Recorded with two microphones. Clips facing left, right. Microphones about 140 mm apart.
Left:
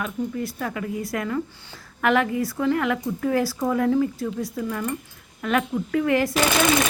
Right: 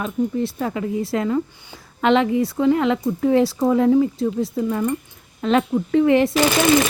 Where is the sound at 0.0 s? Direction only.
25° right (ahead or behind).